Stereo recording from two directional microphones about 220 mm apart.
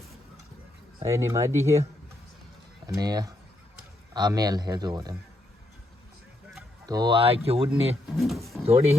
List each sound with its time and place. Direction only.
1.0 s a man's voice: 10° right (ahead or behind)
6.8 s speech: 15° right (ahead or behind)
7.7 s speech: centre (ahead or behind)